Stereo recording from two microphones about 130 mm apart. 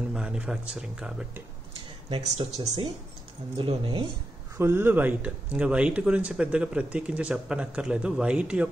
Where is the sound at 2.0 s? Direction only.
50° right (ahead or behind).